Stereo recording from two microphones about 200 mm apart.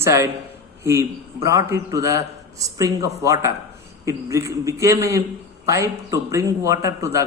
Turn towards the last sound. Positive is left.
turn(degrees=-15)  # may be behind; listen again after turning